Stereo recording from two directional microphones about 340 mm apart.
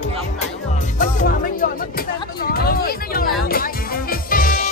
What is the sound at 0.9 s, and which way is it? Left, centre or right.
Music, left.